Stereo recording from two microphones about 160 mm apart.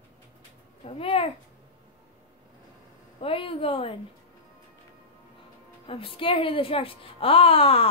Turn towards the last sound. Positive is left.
turn(degrees=35)  # may be behind; listen again after turning